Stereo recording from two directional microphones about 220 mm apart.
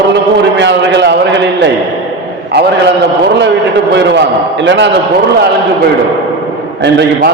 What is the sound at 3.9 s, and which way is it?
A man's voice, 55° right (ahead or behind).